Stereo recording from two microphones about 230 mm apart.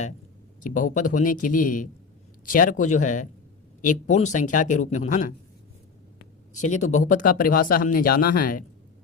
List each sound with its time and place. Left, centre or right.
0.6 s speech: left
6.5 s speech: left